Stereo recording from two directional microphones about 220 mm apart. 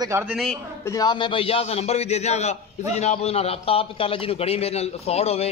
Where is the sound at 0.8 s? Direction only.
15° left (ahead or behind).